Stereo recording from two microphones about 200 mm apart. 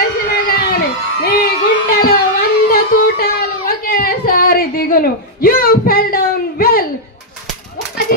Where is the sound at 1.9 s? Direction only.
50° left (ahead or behind).